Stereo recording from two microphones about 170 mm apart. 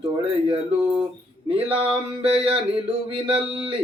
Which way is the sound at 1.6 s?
30° right (ahead or behind).